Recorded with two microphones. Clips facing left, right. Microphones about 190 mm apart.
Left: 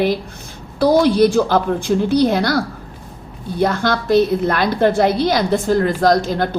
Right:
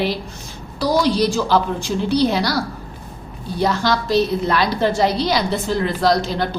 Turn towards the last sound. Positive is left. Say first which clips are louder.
# left 3 dB
turn(degrees=50)  # may be behind; listen again after turning